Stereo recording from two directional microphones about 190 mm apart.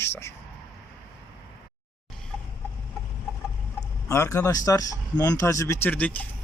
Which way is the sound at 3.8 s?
15° left (ahead or behind).